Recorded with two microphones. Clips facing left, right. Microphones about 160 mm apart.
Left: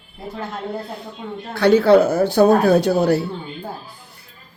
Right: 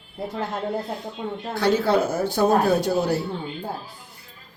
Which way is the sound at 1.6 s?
65° left (ahead or behind).